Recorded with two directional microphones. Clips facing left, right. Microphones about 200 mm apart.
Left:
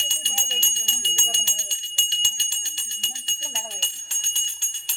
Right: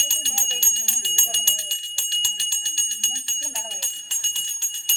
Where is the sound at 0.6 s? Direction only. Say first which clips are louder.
Left 2 dB; 20° left (ahead or behind).